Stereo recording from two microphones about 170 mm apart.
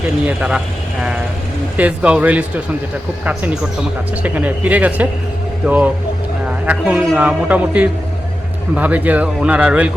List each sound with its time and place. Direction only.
0.3 s speech: 5° right (ahead or behind)
1.7 s a man's voice: 10° right (ahead or behind)